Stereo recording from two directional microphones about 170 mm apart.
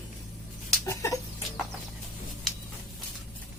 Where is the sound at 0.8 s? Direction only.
20° left (ahead or behind).